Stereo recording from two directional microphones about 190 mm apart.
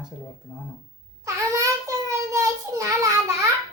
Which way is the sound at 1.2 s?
15° right (ahead or behind).